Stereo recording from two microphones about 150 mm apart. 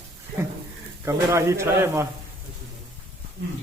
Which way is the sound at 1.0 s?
20° right (ahead or behind).